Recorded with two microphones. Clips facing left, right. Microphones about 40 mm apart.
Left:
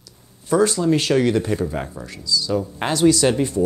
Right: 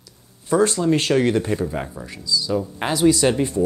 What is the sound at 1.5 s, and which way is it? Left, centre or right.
Speech, centre.